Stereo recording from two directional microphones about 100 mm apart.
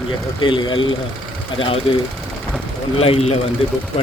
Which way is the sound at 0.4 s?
55° left (ahead or behind).